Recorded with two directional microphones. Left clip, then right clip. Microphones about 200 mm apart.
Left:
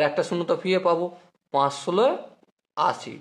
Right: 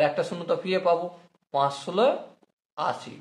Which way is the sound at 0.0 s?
45° left (ahead or behind).